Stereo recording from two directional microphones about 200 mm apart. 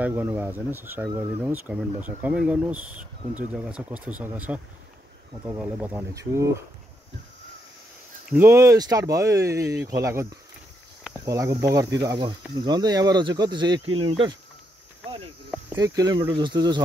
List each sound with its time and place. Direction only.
0.0 s speech: 10° right (ahead or behind)
5.6 s speech: 10° right (ahead or behind)
8.3 s speech: 10° right (ahead or behind)
15.8 s speech: 20° right (ahead or behind)